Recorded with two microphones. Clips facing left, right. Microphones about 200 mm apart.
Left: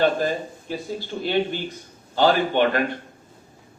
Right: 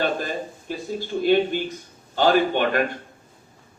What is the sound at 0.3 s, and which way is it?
A man's voice, 50° right (ahead or behind).